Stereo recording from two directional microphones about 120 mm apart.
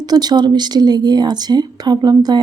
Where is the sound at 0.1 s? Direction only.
35° right (ahead or behind).